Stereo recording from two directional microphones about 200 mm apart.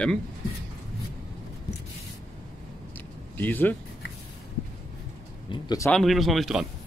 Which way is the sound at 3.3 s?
10° left (ahead or behind).